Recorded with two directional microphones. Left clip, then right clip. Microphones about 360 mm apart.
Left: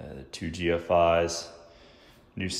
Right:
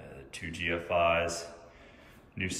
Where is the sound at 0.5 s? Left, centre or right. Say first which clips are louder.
Left 6 dB; left.